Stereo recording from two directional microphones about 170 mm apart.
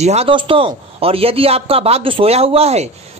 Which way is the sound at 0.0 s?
40° right (ahead or behind).